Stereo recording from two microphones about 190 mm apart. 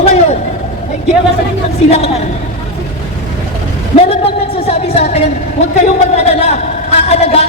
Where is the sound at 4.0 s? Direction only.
30° left (ahead or behind).